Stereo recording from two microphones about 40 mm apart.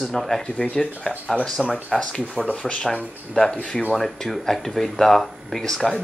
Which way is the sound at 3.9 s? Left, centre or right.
Centre.